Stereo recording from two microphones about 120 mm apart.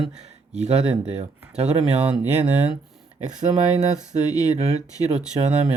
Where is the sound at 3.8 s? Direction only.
75° right (ahead or behind).